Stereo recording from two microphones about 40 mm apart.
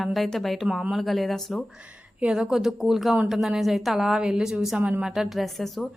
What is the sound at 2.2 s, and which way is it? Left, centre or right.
Speech, right.